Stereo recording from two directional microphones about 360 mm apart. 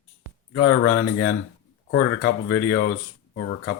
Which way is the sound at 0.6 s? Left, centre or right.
Left.